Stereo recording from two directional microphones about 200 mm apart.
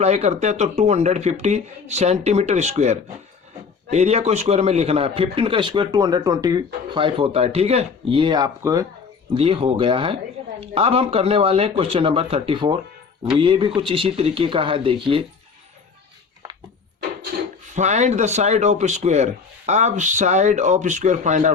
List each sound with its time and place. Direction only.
0.0 s a man's voice: 35° right (ahead or behind)
17.3 s wood: 45° right (ahead or behind)
17.7 s speech: 35° right (ahead or behind)